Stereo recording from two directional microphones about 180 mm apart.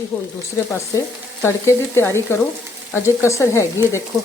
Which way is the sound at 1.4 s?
15° left (ahead or behind).